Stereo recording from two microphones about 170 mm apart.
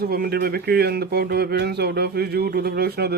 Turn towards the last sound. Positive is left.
turn(degrees=-70)  # may be behind; listen again after turning